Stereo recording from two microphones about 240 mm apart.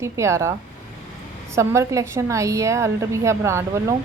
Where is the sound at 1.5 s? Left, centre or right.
Centre.